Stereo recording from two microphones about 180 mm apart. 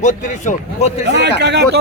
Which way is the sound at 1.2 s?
70° right (ahead or behind).